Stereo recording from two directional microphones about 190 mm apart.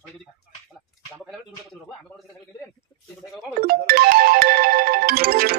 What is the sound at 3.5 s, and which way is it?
Music, 50° right (ahead or behind).